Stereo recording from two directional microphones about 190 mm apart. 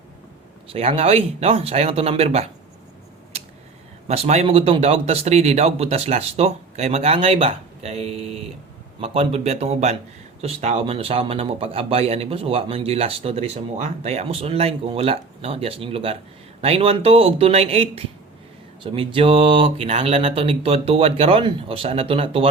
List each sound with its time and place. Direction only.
0.7 s speech: 30° right (ahead or behind)
4.1 s speech: 35° right (ahead or behind)